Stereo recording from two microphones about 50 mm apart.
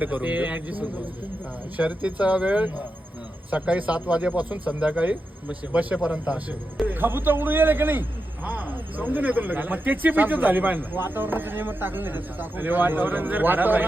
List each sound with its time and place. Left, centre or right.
0.0 s speech: right
6.8 s a man's voice: right